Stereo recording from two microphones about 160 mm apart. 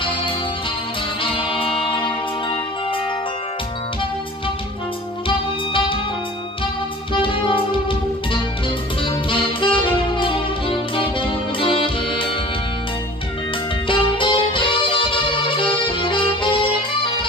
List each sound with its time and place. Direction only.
1.3 s music: 35° left (ahead or behind)
5.7 s music: 30° left (ahead or behind)
7.2 s music: 30° left (ahead or behind)
9.3 s saxophone: 30° left (ahead or behind)
11.0 s music: 30° left (ahead or behind)
13.8 s music: 30° left (ahead or behind)